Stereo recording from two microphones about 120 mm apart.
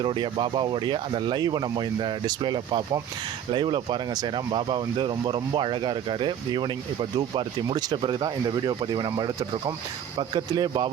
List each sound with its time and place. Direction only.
0.0 s speech: 45° right (ahead or behind)